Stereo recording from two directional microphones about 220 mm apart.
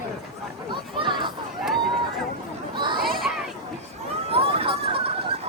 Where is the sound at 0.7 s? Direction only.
20° right (ahead or behind).